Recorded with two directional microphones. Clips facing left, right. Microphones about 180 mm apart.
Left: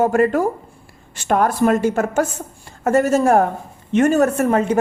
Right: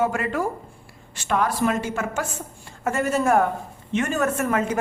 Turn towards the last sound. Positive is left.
turn(degrees=35)  # may be behind; listen again after turning